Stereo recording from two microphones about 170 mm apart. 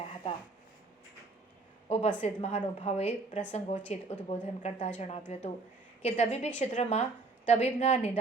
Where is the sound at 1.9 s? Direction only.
40° left (ahead or behind).